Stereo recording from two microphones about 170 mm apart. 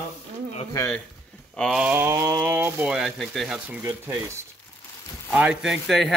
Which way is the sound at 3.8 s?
15° right (ahead or behind).